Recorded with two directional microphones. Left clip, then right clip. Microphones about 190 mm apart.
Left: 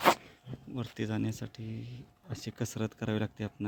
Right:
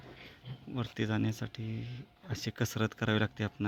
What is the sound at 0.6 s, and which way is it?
Speech, centre (ahead or behind).